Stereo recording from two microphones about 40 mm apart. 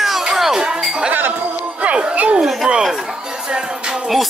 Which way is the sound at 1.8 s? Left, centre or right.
Right.